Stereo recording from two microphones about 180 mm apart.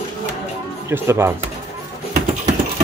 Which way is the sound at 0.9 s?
15° right (ahead or behind).